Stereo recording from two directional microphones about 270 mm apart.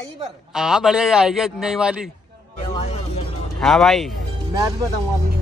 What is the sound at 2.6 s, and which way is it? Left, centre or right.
Music, left.